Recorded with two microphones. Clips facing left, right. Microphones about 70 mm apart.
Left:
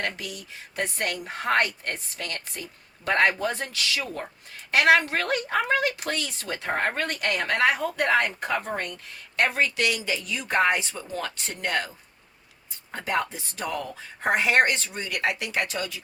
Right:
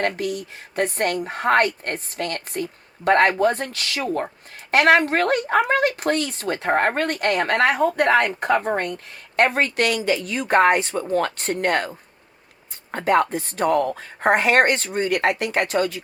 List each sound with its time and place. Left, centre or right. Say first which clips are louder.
0.0 s a woman's voice: right 9 dB; right